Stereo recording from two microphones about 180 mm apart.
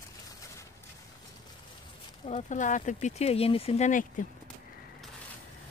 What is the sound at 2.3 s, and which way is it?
Speech, 40° left (ahead or behind).